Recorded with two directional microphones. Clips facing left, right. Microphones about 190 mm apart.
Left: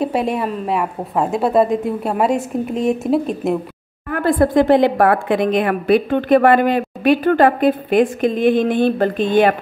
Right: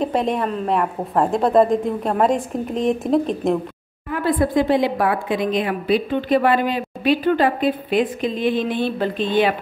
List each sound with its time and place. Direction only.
0.0 s a woman's voice: 5° left (ahead or behind)
4.1 s speech: 50° left (ahead or behind)